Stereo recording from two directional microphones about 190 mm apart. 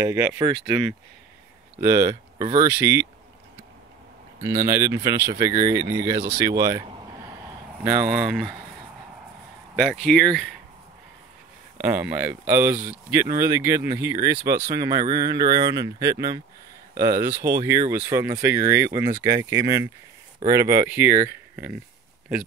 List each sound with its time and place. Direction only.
0.0 s speech: 15° right (ahead or behind)
4.4 s speech: 15° right (ahead or behind)
7.8 s speech: 5° right (ahead or behind)
9.8 s speech: centre (ahead or behind)
11.8 s speech: 10° right (ahead or behind)